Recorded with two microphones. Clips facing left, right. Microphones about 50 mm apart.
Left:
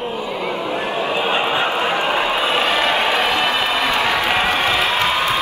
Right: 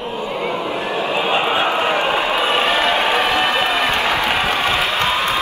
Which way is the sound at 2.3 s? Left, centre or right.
Right.